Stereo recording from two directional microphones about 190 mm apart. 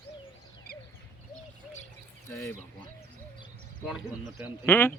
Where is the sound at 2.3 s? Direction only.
15° left (ahead or behind).